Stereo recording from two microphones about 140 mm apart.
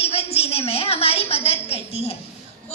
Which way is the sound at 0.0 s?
45° left (ahead or behind).